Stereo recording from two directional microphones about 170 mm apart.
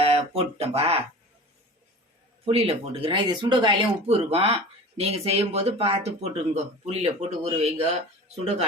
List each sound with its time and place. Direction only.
0.0 s speech: 35° right (ahead or behind)
2.5 s speech: 35° right (ahead or behind)